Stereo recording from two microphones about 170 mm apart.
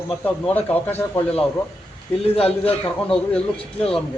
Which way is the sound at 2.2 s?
35° left (ahead or behind).